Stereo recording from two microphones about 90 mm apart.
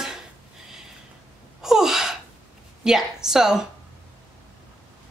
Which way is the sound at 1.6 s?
5° right (ahead or behind).